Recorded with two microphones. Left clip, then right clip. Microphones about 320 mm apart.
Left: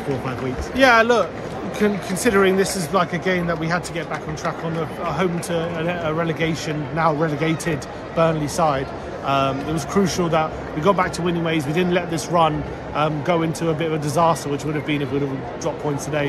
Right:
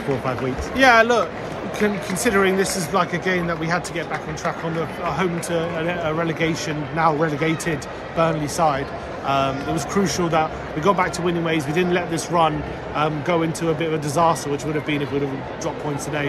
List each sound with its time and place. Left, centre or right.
0.7 s a man's voice: centre
5.0 s a man's voice: centre